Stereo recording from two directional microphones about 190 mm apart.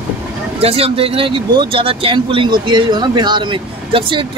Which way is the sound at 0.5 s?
30° right (ahead or behind).